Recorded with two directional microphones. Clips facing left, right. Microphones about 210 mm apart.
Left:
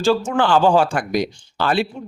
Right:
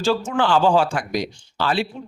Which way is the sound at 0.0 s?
50° left (ahead or behind).